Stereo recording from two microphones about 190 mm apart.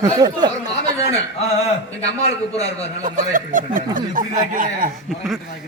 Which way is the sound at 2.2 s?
35° left (ahead or behind).